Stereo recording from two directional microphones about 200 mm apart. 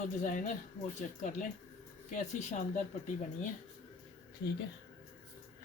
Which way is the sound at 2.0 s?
40° left (ahead or behind).